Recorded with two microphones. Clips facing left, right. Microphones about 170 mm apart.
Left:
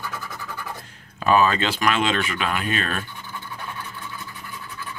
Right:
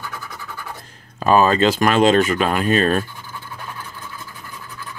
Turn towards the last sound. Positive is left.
turn(degrees=-40)  # may be behind; listen again after turning